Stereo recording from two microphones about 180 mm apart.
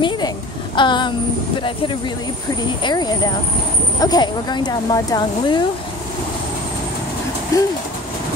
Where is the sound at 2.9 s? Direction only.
20° left (ahead or behind).